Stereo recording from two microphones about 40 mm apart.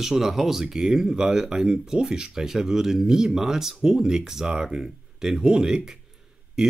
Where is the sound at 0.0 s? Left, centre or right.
Centre.